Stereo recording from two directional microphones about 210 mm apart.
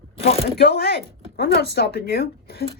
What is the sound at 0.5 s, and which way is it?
A woman's voice, 50° left (ahead or behind).